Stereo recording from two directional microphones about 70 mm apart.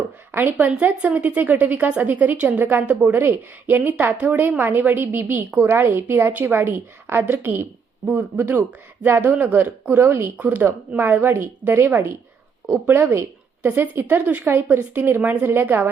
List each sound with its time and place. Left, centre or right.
0.3 s a woman's voice: right
0.9 s a woman's voice: centre
5.7 s a woman's voice: right
12.6 s a woman's voice: centre